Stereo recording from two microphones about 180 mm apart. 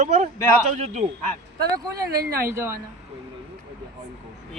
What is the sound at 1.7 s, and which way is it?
Speech, 20° right (ahead or behind).